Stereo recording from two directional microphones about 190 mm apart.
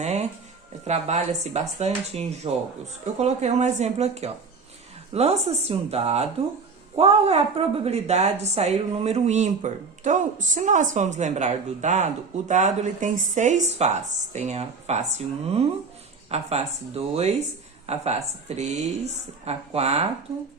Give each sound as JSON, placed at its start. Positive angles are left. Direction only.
{"t": 0.0, "sound": "music", "side_deg": -35}
{"t": 0.9, "sound": "a woman's voice", "side_deg": -35}
{"t": 16.3, "sound": "a woman's voice", "side_deg": -35}